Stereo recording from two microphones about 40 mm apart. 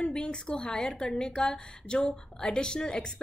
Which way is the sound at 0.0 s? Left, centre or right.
Left.